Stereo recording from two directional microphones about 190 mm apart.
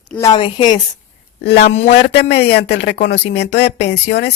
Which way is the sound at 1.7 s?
35° left (ahead or behind).